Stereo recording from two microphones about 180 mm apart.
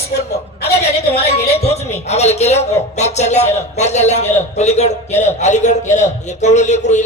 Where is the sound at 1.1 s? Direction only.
35° left (ahead or behind).